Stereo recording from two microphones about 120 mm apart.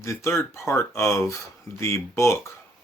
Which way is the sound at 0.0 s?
25° left (ahead or behind).